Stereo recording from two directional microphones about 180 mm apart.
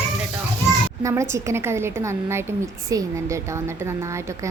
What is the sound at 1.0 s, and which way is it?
A woman's voice, 15° right (ahead or behind).